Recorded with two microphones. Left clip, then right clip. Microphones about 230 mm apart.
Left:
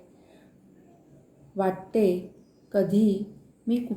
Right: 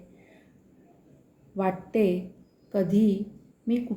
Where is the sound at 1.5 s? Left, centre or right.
Centre.